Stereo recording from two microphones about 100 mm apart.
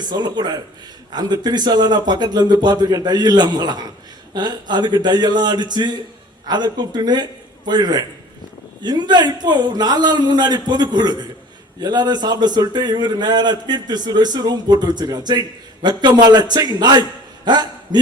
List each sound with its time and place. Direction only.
0.0 s a man's voice: 45° right (ahead or behind)